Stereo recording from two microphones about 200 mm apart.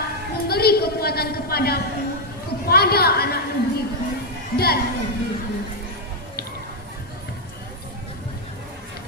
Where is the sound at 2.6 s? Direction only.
50° left (ahead or behind).